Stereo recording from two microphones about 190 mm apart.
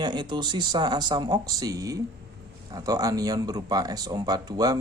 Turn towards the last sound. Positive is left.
turn(degrees=-20)  # may be behind; listen again after turning